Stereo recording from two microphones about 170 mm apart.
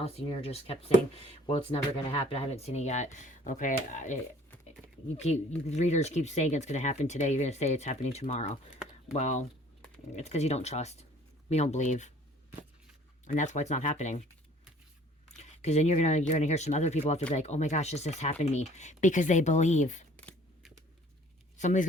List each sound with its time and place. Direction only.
0.0 s speech: 35° left (ahead or behind)
13.2 s speech: 45° left (ahead or behind)
15.4 s speech: 40° left (ahead or behind)
20.1 s a sound: 5° left (ahead or behind)
21.6 s speech: 45° left (ahead or behind)